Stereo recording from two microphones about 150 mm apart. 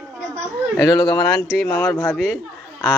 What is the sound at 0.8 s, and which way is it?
Speech, 25° left (ahead or behind).